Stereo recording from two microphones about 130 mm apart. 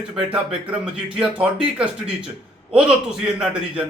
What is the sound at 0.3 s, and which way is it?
Speech, 5° right (ahead or behind).